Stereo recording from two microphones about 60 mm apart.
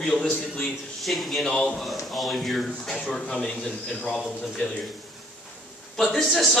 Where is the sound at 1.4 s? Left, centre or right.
Centre.